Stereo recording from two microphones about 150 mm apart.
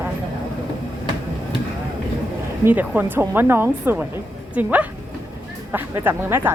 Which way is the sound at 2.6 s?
10° right (ahead or behind).